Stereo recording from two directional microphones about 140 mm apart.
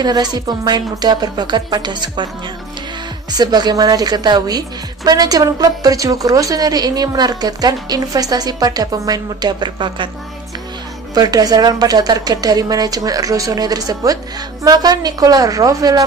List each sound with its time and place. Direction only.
0.0 s speech: 30° right (ahead or behind)
3.3 s speech: 30° right (ahead or behind)
11.1 s speech: 25° right (ahead or behind)